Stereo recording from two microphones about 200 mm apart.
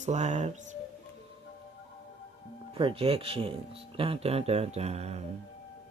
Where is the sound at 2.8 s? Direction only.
30° right (ahead or behind).